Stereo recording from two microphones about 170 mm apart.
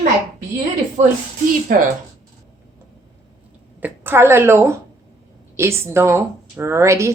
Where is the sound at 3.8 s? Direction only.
10° right (ahead or behind).